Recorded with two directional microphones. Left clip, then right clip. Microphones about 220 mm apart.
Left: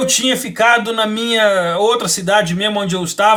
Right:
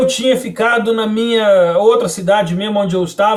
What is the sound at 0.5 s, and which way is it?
Speech, 15° left (ahead or behind).